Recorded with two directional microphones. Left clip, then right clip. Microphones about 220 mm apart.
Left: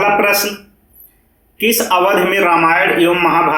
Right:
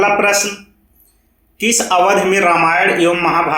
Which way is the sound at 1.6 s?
25° right (ahead or behind).